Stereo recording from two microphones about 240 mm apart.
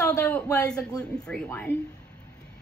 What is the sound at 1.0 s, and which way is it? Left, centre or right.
Speech, centre.